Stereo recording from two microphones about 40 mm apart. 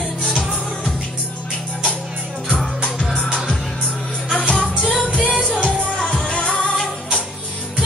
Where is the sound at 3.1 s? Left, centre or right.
Centre.